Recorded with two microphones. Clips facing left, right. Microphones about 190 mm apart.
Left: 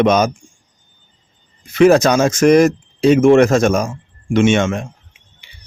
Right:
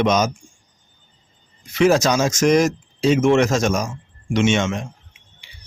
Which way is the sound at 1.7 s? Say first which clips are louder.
Left 5 dB; 60° left (ahead or behind).